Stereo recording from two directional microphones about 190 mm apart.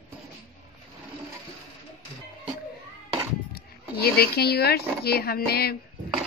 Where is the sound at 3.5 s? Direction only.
55° left (ahead or behind).